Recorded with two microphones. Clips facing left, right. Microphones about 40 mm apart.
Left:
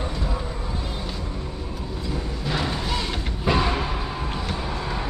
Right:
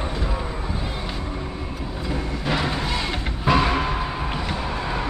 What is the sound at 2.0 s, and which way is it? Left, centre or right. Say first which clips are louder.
Music: right 4 dB; right.